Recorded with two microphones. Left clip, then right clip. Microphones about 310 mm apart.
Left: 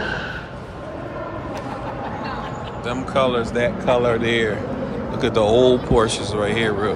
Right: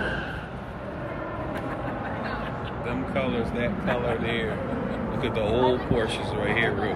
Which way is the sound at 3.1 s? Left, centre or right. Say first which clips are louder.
Left 10 dB; centre.